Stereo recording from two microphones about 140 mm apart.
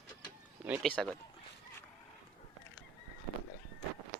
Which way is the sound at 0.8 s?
5° left (ahead or behind).